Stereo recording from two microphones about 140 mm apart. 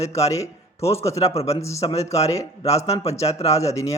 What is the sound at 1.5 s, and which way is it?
Speech, 20° left (ahead or behind).